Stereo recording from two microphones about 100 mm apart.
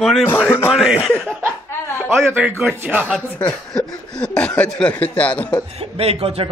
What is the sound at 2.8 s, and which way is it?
Speech, 15° right (ahead or behind).